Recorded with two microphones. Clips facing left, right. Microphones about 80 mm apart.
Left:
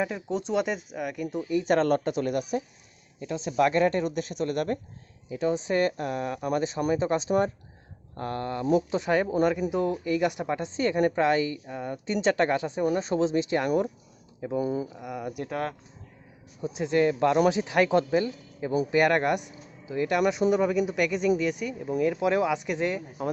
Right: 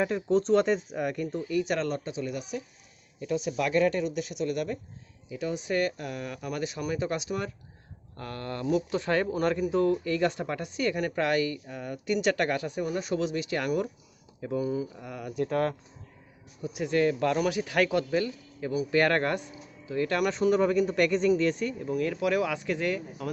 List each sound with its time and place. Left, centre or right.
0.0 s speech: centre
1.6 s speech: left
3.2 s speech: left
5.3 s speech: left
14.6 s speech: left
14.9 s speech: centre
16.6 s speech: left